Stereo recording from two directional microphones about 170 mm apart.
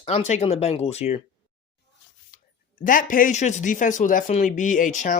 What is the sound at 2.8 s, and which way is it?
Speech, 55° left (ahead or behind).